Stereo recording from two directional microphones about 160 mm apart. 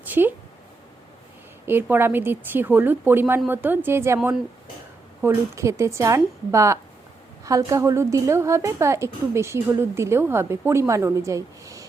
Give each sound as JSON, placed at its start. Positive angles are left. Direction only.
{"t": 0.1, "sound": "speech", "side_deg": -10}
{"t": 1.6, "sound": "a woman's voice", "side_deg": -15}